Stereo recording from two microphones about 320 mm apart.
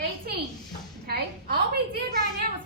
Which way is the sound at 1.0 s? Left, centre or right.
Right.